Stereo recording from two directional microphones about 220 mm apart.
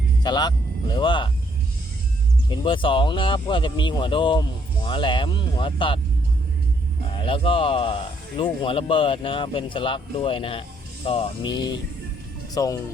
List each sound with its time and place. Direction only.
0.2 s speech: 20° left (ahead or behind)
2.5 s speech: 20° left (ahead or behind)
7.2 s speech: 25° left (ahead or behind)